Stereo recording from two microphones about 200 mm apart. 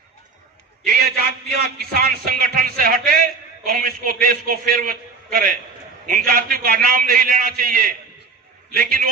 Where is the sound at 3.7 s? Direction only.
45° right (ahead or behind).